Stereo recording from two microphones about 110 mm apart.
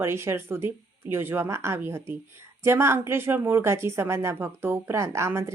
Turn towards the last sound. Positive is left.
turn(degrees=-25)  # may be behind; listen again after turning